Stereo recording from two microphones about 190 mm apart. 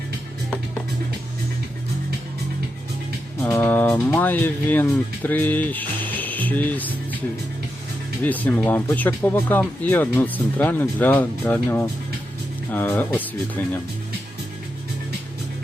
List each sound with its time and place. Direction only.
3.4 s speech: 10° left (ahead or behind)
8.2 s speech: 10° left (ahead or behind)